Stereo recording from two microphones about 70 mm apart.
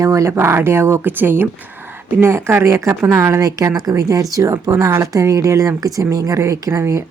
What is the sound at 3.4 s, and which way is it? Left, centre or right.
Speech, right.